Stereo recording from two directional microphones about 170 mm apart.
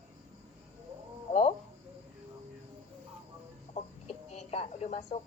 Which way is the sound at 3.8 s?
40° left (ahead or behind).